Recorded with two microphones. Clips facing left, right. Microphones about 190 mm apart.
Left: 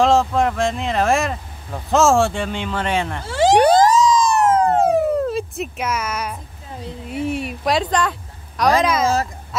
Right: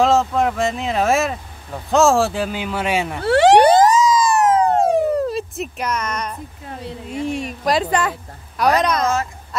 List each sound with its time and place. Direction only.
0.0 s speech: centre (ahead or behind)
3.2 s speech: 65° right (ahead or behind)
3.6 s police car: 5° right (ahead or behind)
7.1 s speech: 5° left (ahead or behind)